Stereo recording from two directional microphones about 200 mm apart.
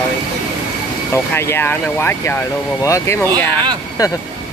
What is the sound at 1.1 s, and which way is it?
Speech, 10° left (ahead or behind).